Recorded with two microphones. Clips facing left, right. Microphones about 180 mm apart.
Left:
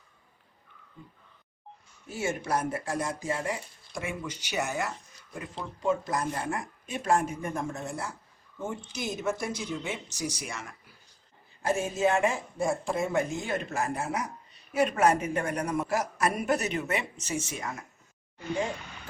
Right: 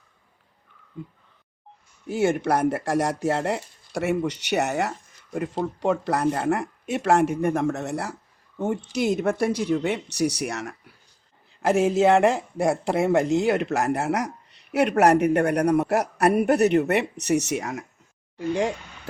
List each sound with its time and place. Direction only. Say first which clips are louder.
2.0 s speech: right 9 dB; 60° right (ahead or behind); by 18.7 s 80° right